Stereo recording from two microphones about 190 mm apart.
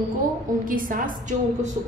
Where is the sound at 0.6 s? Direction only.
45° right (ahead or behind).